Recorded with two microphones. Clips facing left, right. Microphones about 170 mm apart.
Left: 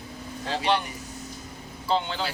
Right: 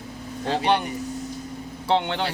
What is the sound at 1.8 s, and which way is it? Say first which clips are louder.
Speech: right 4 dB; 70° right (ahead or behind).